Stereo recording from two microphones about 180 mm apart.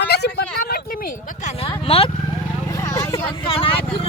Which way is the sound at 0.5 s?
55° left (ahead or behind).